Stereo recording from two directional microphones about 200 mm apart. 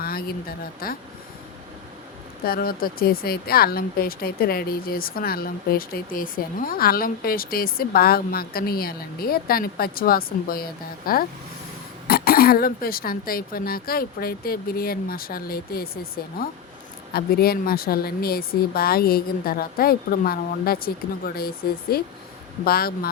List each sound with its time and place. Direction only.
0.0 s speech: 50° left (ahead or behind)
2.4 s speech: 50° left (ahead or behind)